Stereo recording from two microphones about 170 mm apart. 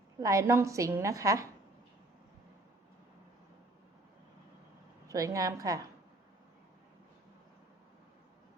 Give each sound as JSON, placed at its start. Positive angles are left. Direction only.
{"t": 0.2, "sound": "a woman's voice", "side_deg": -20}
{"t": 5.0, "sound": "a woman's voice", "side_deg": -20}